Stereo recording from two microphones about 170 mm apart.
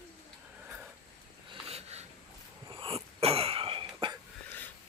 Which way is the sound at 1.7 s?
40° right (ahead or behind).